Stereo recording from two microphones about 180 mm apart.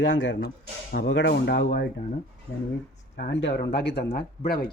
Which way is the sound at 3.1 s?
70° left (ahead or behind).